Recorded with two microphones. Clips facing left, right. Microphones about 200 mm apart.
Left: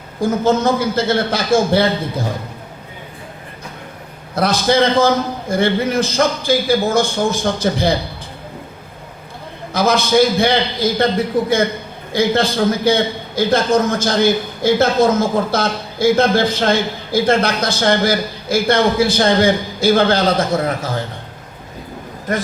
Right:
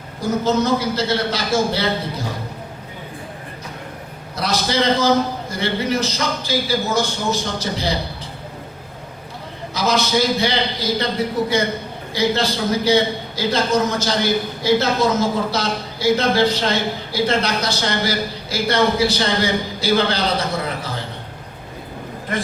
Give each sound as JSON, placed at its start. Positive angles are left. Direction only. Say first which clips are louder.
{"t": 0.2, "sound": "a man's voice", "louder": "left 3 dB", "side_deg": 50}
{"t": 4.4, "sound": "a man's voice", "louder": "left 6 dB", "side_deg": 50}
{"t": 9.7, "sound": "a man's voice", "louder": "left 5 dB", "side_deg": 55}
{"t": 22.3, "sound": "a man's voice", "louder": "left 4 dB", "side_deg": 45}